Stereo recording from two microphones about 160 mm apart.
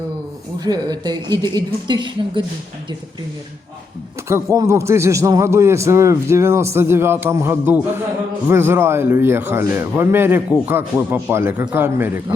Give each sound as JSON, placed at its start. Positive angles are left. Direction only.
{"t": 0.6, "sound": "a woman's voice", "side_deg": -25}
{"t": 4.3, "sound": "a man's voice", "side_deg": -15}